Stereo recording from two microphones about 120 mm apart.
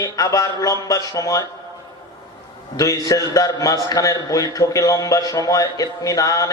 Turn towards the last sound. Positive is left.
turn(degrees=30)  # may be behind; listen again after turning